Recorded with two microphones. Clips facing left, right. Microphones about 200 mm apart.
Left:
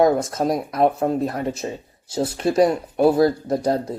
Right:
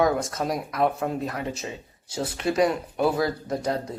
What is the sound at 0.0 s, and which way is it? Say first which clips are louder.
Speech: left 6 dB; 35° left (ahead or behind).